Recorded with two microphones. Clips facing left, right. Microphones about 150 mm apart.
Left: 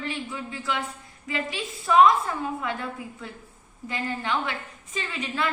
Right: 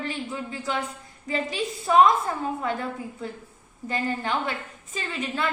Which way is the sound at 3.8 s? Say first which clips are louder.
Right 2 dB; 40° right (ahead or behind).